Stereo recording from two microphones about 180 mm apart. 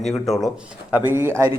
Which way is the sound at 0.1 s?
Centre (ahead or behind).